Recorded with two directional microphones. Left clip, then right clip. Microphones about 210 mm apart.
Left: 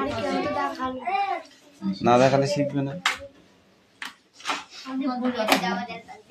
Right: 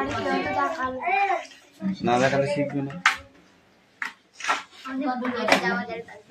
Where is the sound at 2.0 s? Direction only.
25° left (ahead or behind).